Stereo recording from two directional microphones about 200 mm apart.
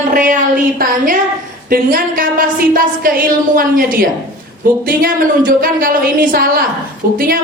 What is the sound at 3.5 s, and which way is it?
A woman's voice, 45° right (ahead or behind).